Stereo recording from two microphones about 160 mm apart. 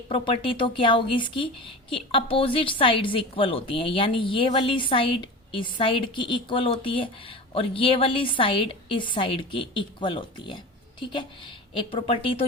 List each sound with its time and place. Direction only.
0.1 s a woman's voice: 30° left (ahead or behind)